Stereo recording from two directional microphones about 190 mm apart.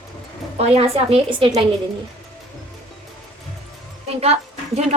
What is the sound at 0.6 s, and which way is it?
A woman's voice, 30° right (ahead or behind).